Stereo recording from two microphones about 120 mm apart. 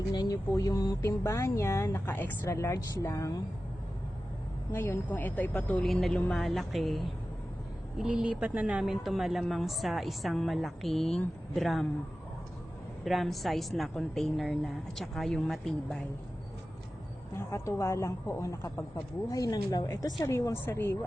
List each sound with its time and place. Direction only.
0.1 s a woman's voice: 30° left (ahead or behind)
4.7 s a woman's voice: 20° left (ahead or behind); by 11.9 s centre (ahead or behind)
13.1 s speech: centre (ahead or behind)
17.3 s a woman's voice: 25° left (ahead or behind)